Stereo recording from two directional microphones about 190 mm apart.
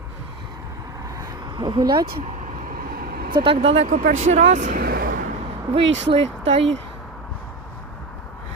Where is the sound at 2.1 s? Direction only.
40° right (ahead or behind).